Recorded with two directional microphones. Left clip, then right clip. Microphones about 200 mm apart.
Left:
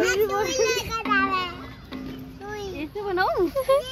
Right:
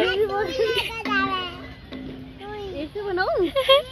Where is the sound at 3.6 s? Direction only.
10° left (ahead or behind).